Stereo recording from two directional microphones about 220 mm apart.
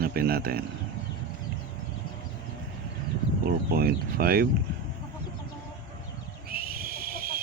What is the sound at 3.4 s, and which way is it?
Speech, 45° right (ahead or behind).